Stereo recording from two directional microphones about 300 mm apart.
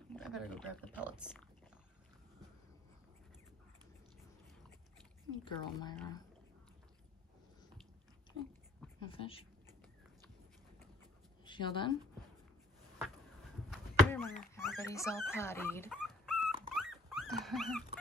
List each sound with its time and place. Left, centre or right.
0.1 s speech: centre
5.4 s speech: centre
9.0 s speech: centre
11.4 s speech: centre
13.7 s chop: centre
14.7 s speech: centre
16.7 s dog: centre